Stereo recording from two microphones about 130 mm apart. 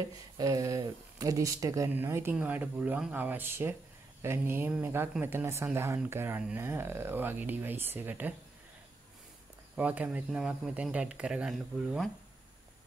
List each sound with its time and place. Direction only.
0.4 s speech: 25° right (ahead or behind)
9.8 s speech: 10° right (ahead or behind)